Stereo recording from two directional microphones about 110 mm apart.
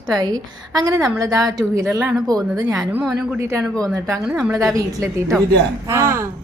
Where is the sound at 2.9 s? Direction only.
10° right (ahead or behind).